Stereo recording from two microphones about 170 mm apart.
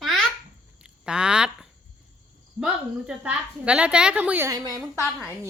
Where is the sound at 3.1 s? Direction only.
5° right (ahead or behind).